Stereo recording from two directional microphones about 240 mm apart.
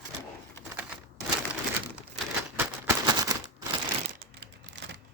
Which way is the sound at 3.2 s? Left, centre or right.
Centre.